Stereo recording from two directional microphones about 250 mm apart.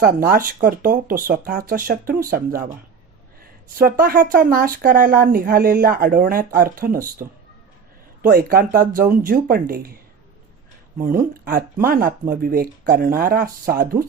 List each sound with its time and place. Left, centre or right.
0.0 s speech: right
3.8 s speech: right
8.3 s speech: right
10.9 s speech: right